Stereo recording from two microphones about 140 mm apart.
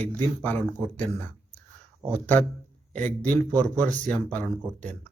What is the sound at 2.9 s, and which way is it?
Speech, 60° right (ahead or behind).